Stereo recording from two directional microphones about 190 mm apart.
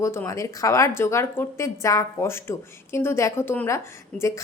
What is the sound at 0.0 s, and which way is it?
A woman's voice, 15° left (ahead or behind).